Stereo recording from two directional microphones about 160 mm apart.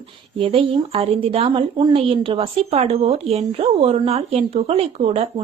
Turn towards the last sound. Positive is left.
turn(degrees=-40)  # may be behind; listen again after turning